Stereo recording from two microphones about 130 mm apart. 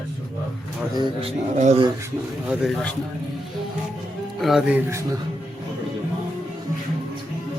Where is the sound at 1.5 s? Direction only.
60° right (ahead or behind).